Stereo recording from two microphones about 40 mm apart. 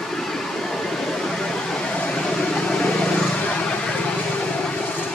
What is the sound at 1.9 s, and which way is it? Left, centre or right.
Vehicle, left.